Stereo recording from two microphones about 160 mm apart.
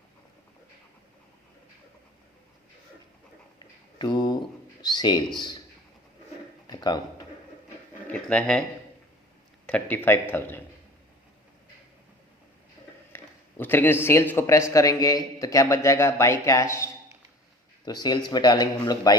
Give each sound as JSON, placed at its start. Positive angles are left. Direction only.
{"t": 3.6, "sound": "a sound", "side_deg": 30}
{"t": 6.7, "sound": "a sound", "side_deg": 25}
{"t": 8.0, "sound": "speech", "side_deg": 5}
{"t": 9.6, "sound": "speech", "side_deg": 10}
{"t": 13.1, "sound": "speech", "side_deg": 15}
{"t": 17.8, "sound": "speech", "side_deg": 25}